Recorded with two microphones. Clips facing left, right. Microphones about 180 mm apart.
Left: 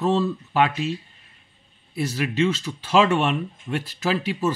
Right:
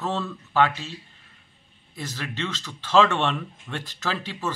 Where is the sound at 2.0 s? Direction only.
10° left (ahead or behind).